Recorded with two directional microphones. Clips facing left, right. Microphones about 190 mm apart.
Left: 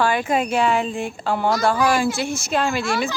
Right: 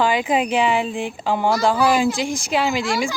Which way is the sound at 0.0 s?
15° right (ahead or behind).